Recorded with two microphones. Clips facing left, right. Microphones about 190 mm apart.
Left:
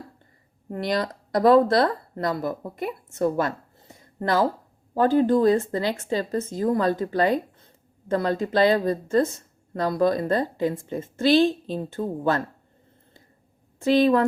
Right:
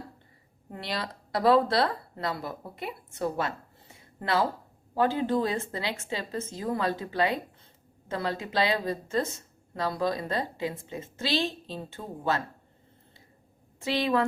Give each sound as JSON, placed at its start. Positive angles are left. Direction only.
{"t": 0.7, "sound": "a woman's voice", "side_deg": 45}
{"t": 13.8, "sound": "a woman's voice", "side_deg": 45}